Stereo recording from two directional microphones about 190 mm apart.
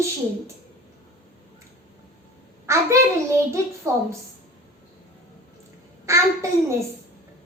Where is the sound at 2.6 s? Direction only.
15° right (ahead or behind).